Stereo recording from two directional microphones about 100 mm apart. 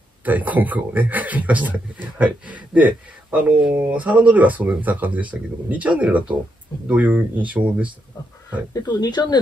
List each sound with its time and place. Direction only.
0.2 s a man's voice: 15° right (ahead or behind)
8.8 s speech: 45° left (ahead or behind)